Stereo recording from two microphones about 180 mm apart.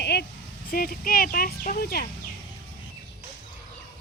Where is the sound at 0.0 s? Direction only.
65° left (ahead or behind).